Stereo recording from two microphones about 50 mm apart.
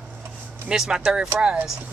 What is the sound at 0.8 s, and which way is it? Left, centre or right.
Speech, centre.